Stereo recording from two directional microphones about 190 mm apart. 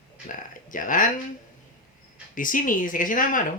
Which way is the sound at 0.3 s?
45° left (ahead or behind).